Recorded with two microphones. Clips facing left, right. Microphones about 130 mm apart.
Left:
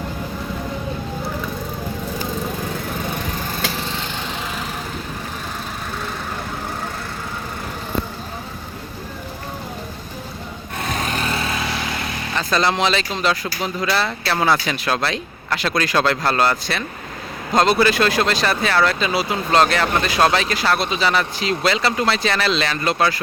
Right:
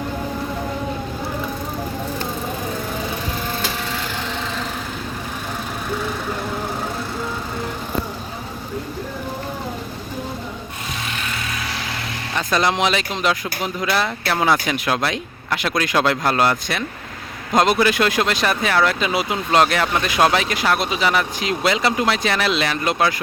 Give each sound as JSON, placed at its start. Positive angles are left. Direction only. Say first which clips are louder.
{"t": 10.8, "sound": "vehicle", "louder": "left 7 dB", "side_deg": 45}
{"t": 12.4, "sound": "speech", "louder": "even", "side_deg": -15}